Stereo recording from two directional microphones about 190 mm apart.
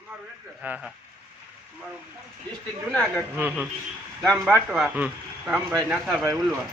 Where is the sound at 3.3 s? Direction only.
10° right (ahead or behind).